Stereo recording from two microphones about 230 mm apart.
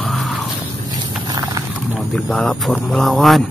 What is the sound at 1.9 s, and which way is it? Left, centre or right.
Speech, centre.